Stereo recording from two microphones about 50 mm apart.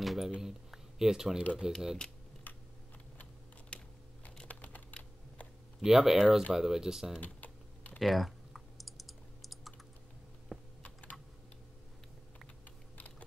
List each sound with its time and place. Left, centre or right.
0.0 s speech: centre
3.7 s typing: left
4.5 s computer keyboard: left
5.8 s speech: centre
7.2 s typing: left
8.0 s typing: centre
10.8 s typing: left